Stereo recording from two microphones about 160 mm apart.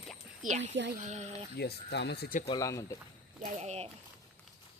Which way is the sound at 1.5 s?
90° left.